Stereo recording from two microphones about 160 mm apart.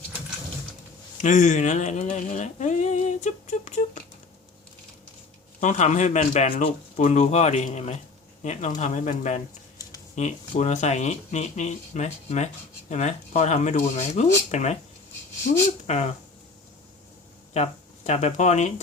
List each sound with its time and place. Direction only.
1.2 s speech: 50° left (ahead or behind)
5.5 s speech: 50° left (ahead or behind)
15.9 s speech: 45° left (ahead or behind)
17.5 s speech: 45° left (ahead or behind)